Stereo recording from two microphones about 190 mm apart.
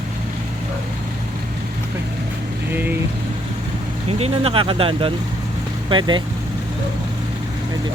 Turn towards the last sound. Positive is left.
turn(degrees=-25)  # may be behind; listen again after turning